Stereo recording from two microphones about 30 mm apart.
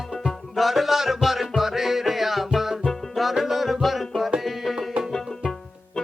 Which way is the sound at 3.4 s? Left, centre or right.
Centre.